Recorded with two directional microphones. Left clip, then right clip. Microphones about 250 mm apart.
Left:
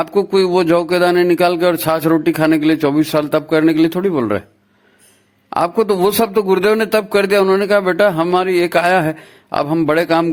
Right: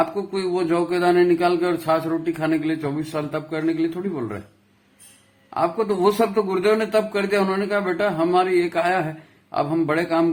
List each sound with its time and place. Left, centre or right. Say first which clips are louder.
0.0 s speech: left 9 dB; left
5.5 s speech: left 7 dB; left